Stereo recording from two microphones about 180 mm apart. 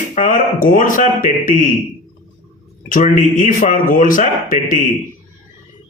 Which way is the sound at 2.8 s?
45° left (ahead or behind).